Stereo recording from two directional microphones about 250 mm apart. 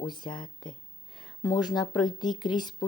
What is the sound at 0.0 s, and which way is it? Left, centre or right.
Speech, centre.